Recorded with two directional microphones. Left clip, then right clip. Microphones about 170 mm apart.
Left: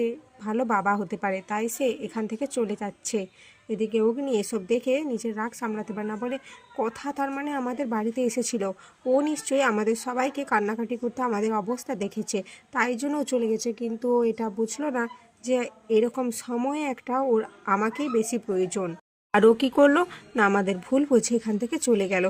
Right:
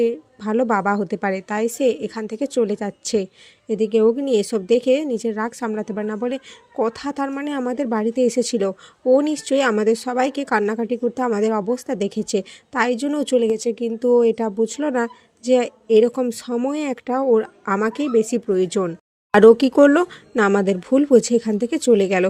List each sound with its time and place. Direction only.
0.0 s speech: 35° right (ahead or behind)